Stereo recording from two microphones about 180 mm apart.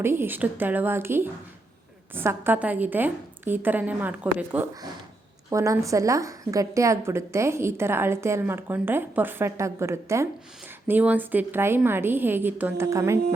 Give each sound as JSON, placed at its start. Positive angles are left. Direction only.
{"t": 0.0, "sound": "a woman's voice", "side_deg": -15}